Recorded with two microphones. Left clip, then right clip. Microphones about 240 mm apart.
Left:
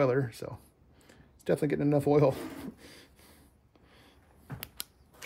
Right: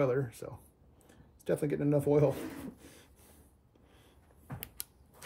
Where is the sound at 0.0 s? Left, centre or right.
Left.